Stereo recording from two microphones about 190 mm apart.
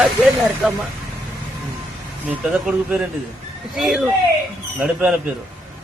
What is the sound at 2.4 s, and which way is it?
Speech, centre (ahead or behind).